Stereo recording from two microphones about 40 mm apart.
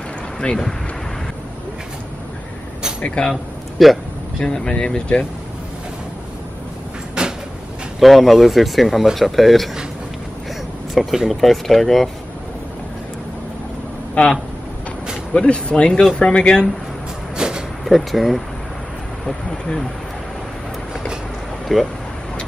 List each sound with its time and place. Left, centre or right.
0.4 s speech: left
3.2 s speech: left
3.7 s speech: centre
4.4 s speech: centre
7.2 s vehicle: right
8.0 s speech: centre
11.0 s speech: centre
14.2 s speech: left
15.3 s speech: left
17.4 s a sound: centre
17.8 s speech: centre
19.2 s a sound: centre
21.7 s speech: centre